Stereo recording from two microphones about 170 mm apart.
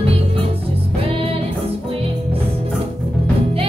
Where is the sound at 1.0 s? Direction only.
35° right (ahead or behind).